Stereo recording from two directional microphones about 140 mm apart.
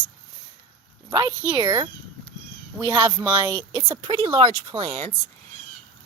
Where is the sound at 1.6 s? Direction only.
35° right (ahead or behind).